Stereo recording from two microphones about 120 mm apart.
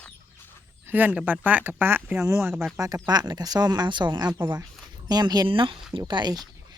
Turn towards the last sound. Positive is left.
turn(degrees=-35)  # may be behind; listen again after turning